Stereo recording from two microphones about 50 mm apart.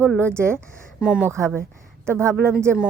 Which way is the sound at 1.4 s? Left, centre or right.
Right.